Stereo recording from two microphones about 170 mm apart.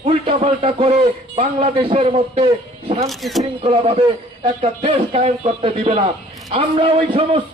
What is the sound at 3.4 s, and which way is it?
A man's voice, 30° right (ahead or behind).